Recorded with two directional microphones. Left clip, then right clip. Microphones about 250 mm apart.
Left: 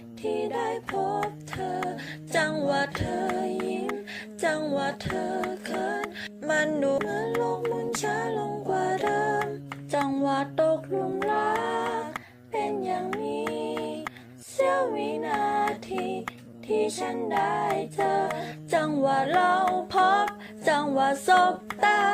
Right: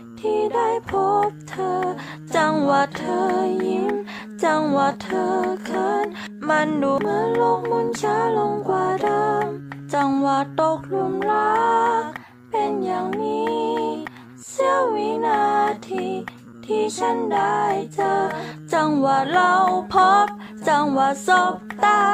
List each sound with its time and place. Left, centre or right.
0.2 s music: centre
11.2 s a sound: centre
13.2 s music: centre
14.5 s female singing: centre
16.6 s music: centre